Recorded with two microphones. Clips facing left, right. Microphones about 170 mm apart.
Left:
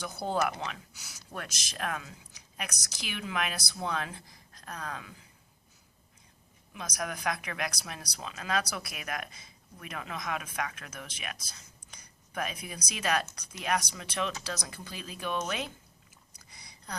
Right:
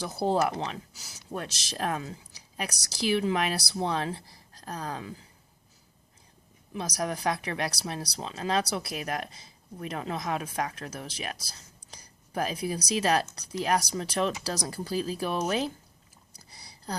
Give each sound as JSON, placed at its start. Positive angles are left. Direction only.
{"t": 0.0, "sound": "speech", "side_deg": -30}
{"t": 6.7, "sound": "speech", "side_deg": -35}
{"t": 16.4, "sound": "a sound", "side_deg": -35}